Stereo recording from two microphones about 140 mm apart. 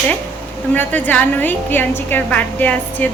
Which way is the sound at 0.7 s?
10° left (ahead or behind).